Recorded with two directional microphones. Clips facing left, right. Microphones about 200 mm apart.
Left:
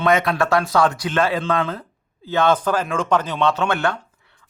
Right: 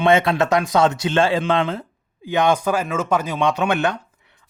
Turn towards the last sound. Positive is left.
turn(degrees=-20)  # may be behind; listen again after turning